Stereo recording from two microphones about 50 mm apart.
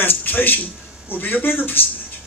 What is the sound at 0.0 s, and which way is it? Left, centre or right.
Speech, left.